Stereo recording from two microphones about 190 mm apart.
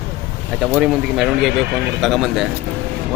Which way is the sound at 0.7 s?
5° right (ahead or behind).